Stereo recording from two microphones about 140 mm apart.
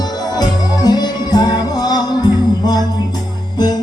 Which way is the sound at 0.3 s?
30° left (ahead or behind).